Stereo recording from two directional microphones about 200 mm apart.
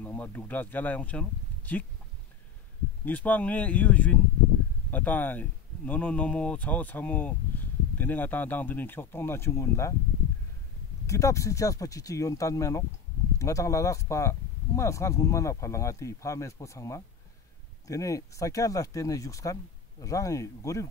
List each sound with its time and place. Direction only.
0.0 s speech: 10° left (ahead or behind)
3.1 s speech: 10° left (ahead or behind)
11.1 s speech: 15° left (ahead or behind)